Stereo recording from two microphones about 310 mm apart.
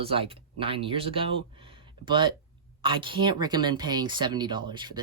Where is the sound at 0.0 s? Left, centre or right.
Centre.